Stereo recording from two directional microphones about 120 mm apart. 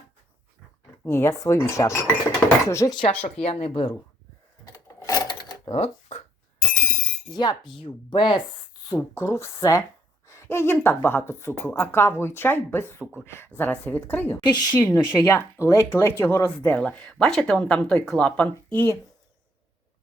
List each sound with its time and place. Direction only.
1.0 s speech: 25° left (ahead or behind)
2.9 s speech: 50° left (ahead or behind)
4.6 s a sound: 30° left (ahead or behind)
5.7 s speech: 60° left (ahead or behind)
7.3 s cutlery: 40° left (ahead or behind)
8.1 s speech: 45° left (ahead or behind)
9.0 s speech: 25° left (ahead or behind)
14.4 s cutlery: 35° left (ahead or behind)
14.8 s speech: 20° left (ahead or behind)